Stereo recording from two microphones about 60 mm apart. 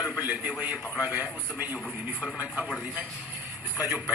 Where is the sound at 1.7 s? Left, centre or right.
Centre.